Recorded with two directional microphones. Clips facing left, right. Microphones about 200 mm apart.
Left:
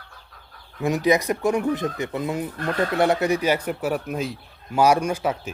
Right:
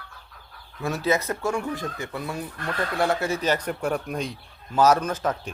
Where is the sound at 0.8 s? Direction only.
15° left (ahead or behind).